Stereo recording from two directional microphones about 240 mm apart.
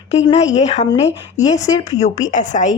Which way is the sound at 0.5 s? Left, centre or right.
Left.